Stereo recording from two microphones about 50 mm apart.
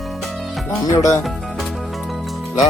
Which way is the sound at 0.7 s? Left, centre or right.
Left.